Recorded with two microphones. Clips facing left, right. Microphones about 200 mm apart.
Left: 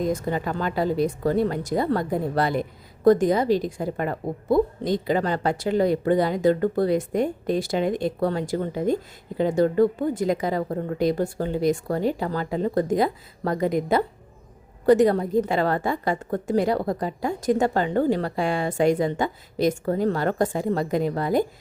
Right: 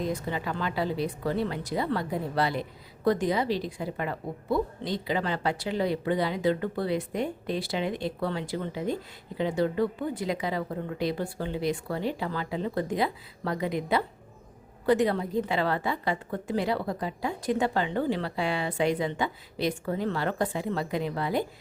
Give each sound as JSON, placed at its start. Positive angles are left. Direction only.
{"t": 0.0, "sound": "speech", "side_deg": 45}